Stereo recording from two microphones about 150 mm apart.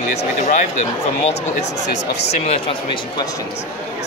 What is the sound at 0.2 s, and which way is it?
Speech, 55° left (ahead or behind).